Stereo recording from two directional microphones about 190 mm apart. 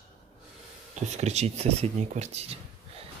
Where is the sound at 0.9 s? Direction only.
35° right (ahead or behind).